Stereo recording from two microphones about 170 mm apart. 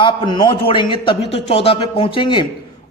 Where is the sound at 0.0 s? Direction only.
30° left (ahead or behind).